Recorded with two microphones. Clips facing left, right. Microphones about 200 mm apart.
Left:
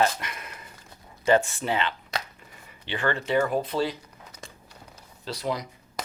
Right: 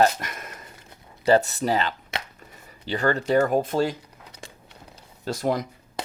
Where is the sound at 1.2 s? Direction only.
35° right (ahead or behind).